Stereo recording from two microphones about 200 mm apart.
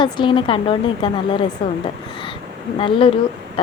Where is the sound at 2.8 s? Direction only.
25° left (ahead or behind).